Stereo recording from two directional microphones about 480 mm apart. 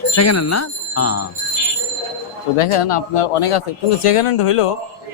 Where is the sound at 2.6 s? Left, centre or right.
Left.